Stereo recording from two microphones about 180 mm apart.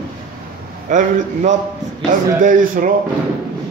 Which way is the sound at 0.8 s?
45° right (ahead or behind).